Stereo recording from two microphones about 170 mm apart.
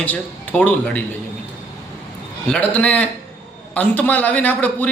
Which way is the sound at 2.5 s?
5° left (ahead or behind).